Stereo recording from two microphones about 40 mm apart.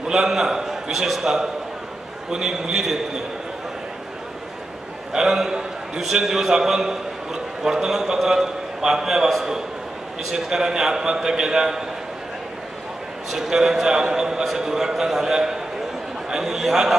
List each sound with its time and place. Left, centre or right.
0.1 s a man's voice: centre
5.1 s a man's voice: centre
10.3 s a man's voice: centre
13.3 s a man's voice: centre
16.3 s chatter: centre
16.5 s a man's voice: centre